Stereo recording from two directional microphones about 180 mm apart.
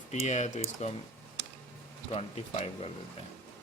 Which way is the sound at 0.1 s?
40° left (ahead or behind).